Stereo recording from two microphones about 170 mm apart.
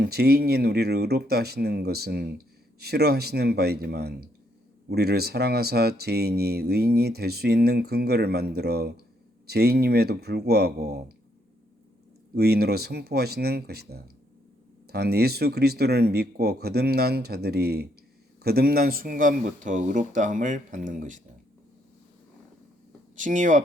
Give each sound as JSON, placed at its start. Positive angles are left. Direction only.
{"t": 0.0, "sound": "speech", "side_deg": -70}
{"t": 12.3, "sound": "speech", "side_deg": -70}
{"t": 23.1, "sound": "speech", "side_deg": -50}